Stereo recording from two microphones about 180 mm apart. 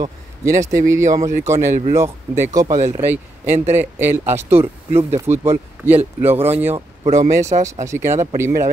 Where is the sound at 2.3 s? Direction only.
15° right (ahead or behind).